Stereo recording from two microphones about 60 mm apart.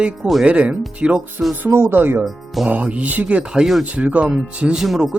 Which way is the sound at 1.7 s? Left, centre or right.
Right.